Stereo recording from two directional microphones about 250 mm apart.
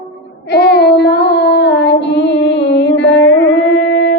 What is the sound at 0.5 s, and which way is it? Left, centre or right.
Child singing, left.